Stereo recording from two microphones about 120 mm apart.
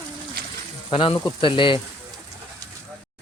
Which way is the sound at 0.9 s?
50° left (ahead or behind).